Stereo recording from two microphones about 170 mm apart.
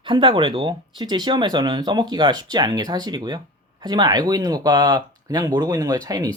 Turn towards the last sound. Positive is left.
turn(degrees=-20)  # may be behind; listen again after turning